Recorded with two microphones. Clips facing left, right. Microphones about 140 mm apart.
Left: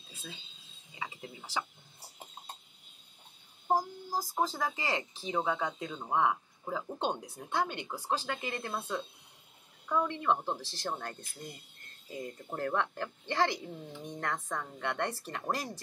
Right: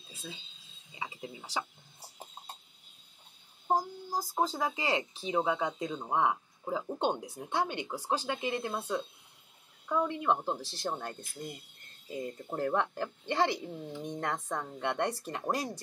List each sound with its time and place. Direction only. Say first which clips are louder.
0.9 s speech: right 2 dB; 15° right (ahead or behind)
3.6 s speech: even; 10° right (ahead or behind)